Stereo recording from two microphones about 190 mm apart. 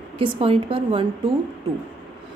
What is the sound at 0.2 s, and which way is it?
Speech, 30° right (ahead or behind).